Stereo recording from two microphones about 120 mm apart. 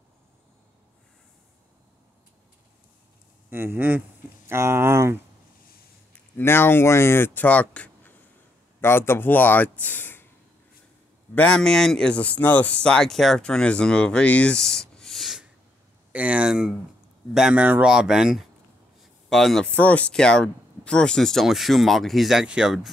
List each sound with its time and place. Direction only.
3.4 s speech: 15° right (ahead or behind)
6.3 s speech: 20° left (ahead or behind)
11.3 s speech: 10° left (ahead or behind)